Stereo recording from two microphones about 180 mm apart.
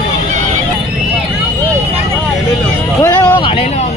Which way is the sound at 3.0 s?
15° left (ahead or behind).